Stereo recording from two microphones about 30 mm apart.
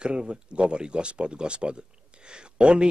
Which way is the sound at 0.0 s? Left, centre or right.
Right.